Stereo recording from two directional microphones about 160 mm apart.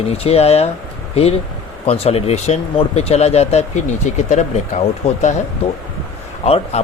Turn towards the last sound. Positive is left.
turn(degrees=40)  # may be behind; listen again after turning